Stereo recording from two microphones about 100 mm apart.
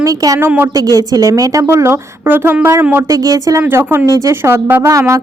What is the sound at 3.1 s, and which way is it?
Speech, 35° right (ahead or behind).